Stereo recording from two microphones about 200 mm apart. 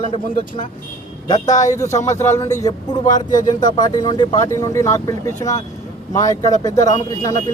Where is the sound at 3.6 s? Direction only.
20° left (ahead or behind).